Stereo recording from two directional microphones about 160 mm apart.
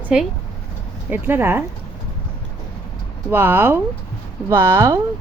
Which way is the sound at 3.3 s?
15° right (ahead or behind).